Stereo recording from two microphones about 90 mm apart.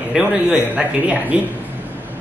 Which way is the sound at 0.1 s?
10° right (ahead or behind).